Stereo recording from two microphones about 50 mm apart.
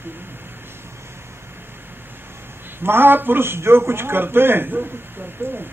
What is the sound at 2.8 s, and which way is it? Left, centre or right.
A man's voice, right.